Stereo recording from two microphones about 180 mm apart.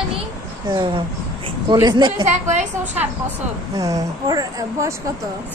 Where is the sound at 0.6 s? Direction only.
25° right (ahead or behind).